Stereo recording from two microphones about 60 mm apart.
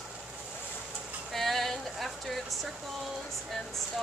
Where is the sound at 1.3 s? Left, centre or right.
Centre.